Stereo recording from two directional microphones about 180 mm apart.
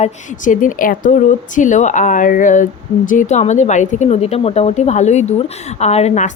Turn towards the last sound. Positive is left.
turn(degrees=40)  # may be behind; listen again after turning